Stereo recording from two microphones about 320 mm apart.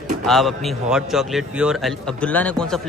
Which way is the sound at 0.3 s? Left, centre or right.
Centre.